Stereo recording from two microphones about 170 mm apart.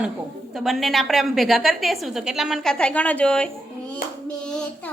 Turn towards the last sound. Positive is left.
turn(degrees=5)  # may be behind; listen again after turning